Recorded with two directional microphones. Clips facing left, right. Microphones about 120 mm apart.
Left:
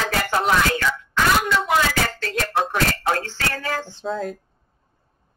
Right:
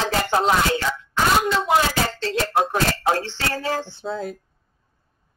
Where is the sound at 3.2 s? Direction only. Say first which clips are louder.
Right 2 dB; 25° right (ahead or behind).